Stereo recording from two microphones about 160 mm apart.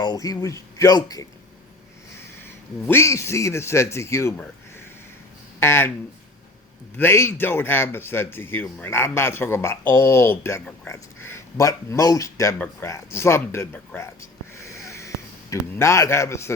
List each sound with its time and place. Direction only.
0.0 s a man's voice: 25° left (ahead or behind)
2.8 s speech: 15° left (ahead or behind)
5.5 s speech: 15° left (ahead or behind)
6.9 s speech: 15° left (ahead or behind)